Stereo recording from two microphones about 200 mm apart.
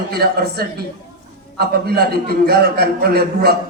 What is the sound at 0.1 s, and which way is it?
A man's voice, 50° right (ahead or behind).